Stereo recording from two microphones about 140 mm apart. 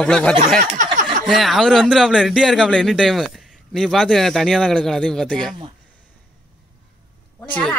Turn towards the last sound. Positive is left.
turn(degrees=5)  # may be behind; listen again after turning